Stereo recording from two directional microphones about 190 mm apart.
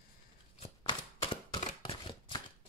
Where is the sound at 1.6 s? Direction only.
30° left (ahead or behind).